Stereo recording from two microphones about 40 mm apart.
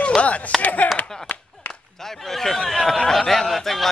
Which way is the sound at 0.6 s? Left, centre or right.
Left.